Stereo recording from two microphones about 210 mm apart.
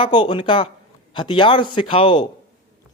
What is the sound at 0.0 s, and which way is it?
Speech, 20° left (ahead or behind).